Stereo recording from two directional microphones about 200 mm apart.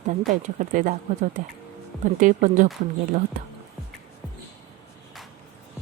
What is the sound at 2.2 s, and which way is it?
Speech, 40° right (ahead or behind).